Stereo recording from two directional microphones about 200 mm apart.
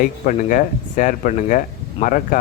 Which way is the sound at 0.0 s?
40° left (ahead or behind).